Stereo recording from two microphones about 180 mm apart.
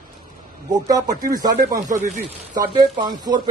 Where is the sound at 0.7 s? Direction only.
20° right (ahead or behind).